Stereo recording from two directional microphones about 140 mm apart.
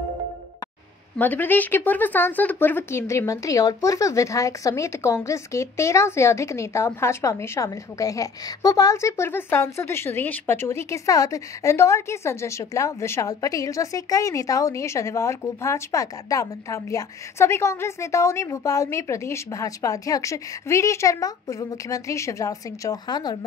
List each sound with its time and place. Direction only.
1.1 s speech: 10° left (ahead or behind); by 23.3 s 30° left (ahead or behind)